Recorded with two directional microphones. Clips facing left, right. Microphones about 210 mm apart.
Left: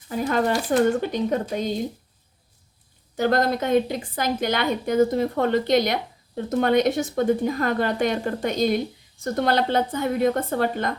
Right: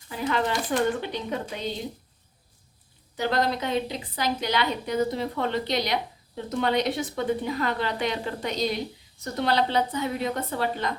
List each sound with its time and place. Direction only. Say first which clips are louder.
0.1 s a woman's voice: left 4 dB; 45° left (ahead or behind)
3.2 s a woman's voice: left 4 dB; 50° left (ahead or behind)